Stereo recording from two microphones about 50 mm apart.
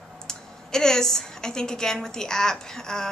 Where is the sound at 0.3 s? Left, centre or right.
Centre.